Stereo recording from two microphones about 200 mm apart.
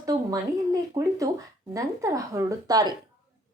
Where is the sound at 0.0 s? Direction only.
15° right (ahead or behind).